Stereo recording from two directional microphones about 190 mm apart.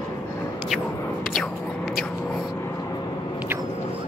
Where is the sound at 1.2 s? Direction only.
Centre (ahead or behind).